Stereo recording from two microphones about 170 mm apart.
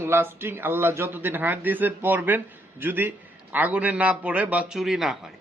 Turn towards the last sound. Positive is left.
turn(degrees=0)  # may be behind; listen again after turning